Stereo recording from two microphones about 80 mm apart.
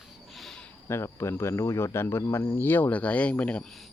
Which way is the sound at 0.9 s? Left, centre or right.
Left.